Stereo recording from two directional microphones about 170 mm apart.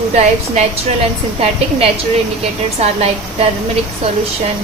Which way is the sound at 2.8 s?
40° right (ahead or behind).